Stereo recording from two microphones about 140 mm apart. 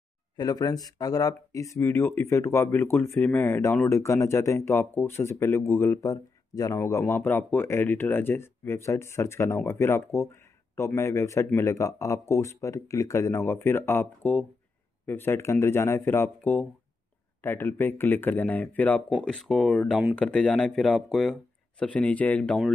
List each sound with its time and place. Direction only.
0.4 s speech: 25° left (ahead or behind); by 19.1 s 10° left (ahead or behind)
19.2 s speech: centre (ahead or behind)